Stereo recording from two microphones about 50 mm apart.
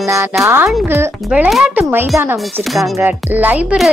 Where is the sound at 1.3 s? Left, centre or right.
Right.